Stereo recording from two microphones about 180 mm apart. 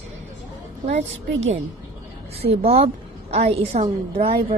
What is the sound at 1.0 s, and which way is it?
A woman's voice, 35° right (ahead or behind).